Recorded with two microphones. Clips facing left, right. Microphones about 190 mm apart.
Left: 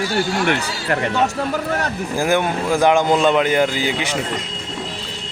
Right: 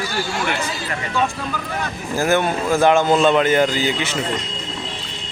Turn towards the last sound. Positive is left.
turn(degrees=10)  # may be behind; listen again after turning